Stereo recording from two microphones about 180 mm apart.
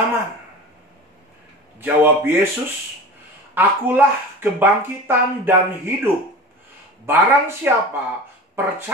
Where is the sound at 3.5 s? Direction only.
10° right (ahead or behind).